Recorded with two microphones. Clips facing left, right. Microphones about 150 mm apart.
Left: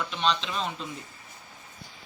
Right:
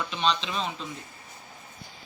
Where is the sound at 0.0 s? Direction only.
Centre (ahead or behind).